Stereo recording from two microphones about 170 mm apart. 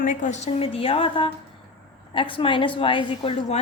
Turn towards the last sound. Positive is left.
turn(degrees=30)  # may be behind; listen again after turning